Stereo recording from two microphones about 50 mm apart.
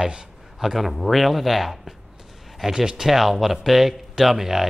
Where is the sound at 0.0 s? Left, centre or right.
Centre.